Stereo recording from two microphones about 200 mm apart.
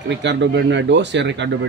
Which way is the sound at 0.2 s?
60° right (ahead or behind).